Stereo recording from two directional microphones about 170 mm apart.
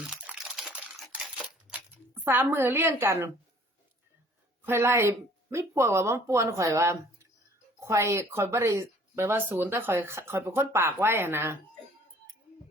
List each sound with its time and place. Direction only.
0.0 s crumpling: 5° right (ahead or behind)
2.1 s speech: 15° right (ahead or behind)
4.6 s speech: 15° right (ahead or behind)